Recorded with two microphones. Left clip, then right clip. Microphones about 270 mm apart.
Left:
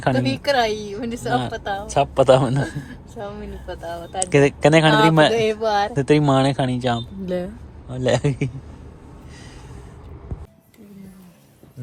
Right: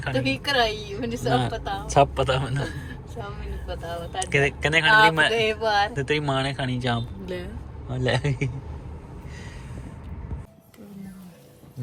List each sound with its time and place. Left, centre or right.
0.0 s speech: centre
4.3 s a man's voice: left